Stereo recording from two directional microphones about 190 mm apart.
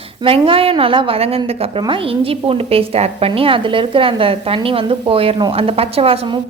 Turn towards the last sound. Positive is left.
turn(degrees=-30)  # may be behind; listen again after turning